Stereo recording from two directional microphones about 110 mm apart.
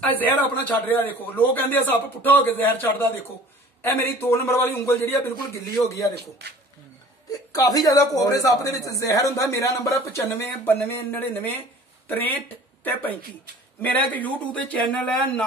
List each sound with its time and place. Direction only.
0.2 s a man's voice: 15° left (ahead or behind)
7.5 s speech: 35° left (ahead or behind)
12.8 s a man's voice: 15° left (ahead or behind)